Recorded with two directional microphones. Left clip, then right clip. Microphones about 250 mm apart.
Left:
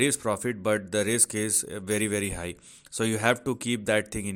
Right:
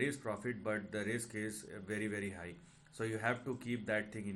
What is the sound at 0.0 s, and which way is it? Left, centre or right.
Speech, left.